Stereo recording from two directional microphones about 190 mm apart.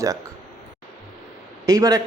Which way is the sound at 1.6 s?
15° right (ahead or behind).